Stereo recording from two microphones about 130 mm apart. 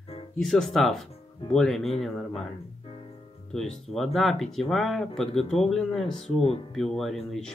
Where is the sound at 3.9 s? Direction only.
Centre (ahead or behind).